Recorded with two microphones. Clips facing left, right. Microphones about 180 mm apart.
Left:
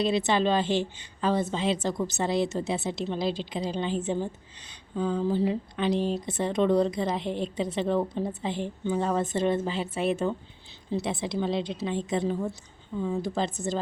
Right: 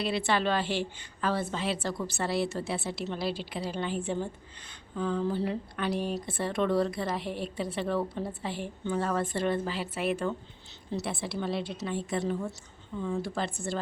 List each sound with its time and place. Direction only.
0.0 s a woman's voice: 20° left (ahead or behind)